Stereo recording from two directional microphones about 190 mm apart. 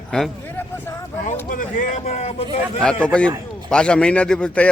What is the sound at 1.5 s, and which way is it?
Speech, 45° left (ahead or behind).